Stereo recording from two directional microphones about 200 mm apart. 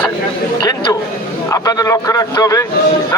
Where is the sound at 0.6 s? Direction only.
20° left (ahead or behind).